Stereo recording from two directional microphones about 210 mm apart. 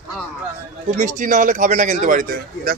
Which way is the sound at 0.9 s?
35° right (ahead or behind).